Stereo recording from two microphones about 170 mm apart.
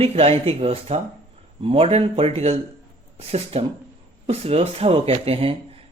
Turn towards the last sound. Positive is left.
turn(degrees=-35)  # may be behind; listen again after turning